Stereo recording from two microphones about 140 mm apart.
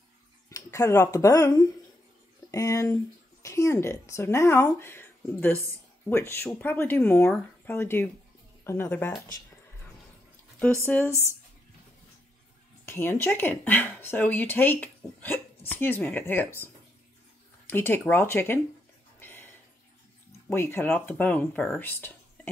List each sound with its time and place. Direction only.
0.5 s speech: 20° left (ahead or behind)
10.9 s speech: 10° left (ahead or behind)
12.8 s speech: 15° left (ahead or behind)
19.1 s a sound: 15° left (ahead or behind)
20.4 s speech: 15° left (ahead or behind)